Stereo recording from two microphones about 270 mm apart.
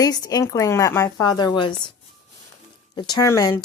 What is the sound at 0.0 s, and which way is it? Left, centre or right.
Speech, centre.